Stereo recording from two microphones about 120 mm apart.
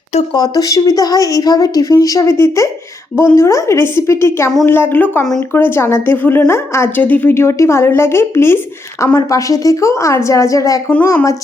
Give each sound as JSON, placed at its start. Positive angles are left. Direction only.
{"t": 0.3, "sound": "a woman's voice", "side_deg": 30}